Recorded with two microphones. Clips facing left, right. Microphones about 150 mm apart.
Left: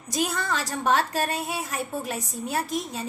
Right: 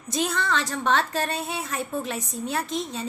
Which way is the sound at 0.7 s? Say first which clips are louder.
Left 4 dB; 45° left (ahead or behind).